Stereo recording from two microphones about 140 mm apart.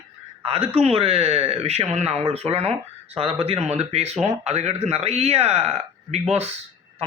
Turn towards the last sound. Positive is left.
turn(degrees=-50)  # may be behind; listen again after turning